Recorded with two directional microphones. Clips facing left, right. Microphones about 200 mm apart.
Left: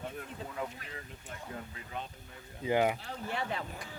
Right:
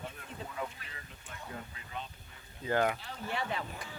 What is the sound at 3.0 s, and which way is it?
Speech, 45° left (ahead or behind).